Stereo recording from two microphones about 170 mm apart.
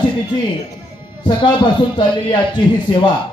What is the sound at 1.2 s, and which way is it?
A man's voice, 30° left (ahead or behind).